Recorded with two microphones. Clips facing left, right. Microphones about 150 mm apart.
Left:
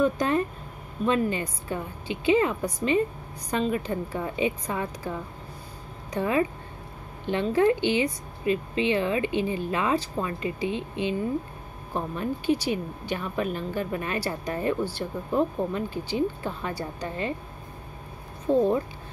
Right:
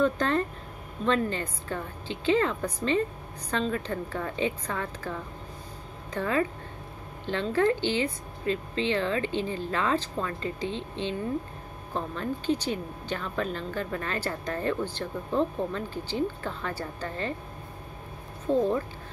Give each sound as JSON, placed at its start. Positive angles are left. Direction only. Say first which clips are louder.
{"t": 0.0, "sound": "speech", "louder": "left 2 dB", "side_deg": 10}
{"t": 18.5, "sound": "speech", "louder": "left 3 dB", "side_deg": 15}